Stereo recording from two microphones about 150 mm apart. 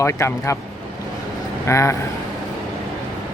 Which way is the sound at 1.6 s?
20° left (ahead or behind).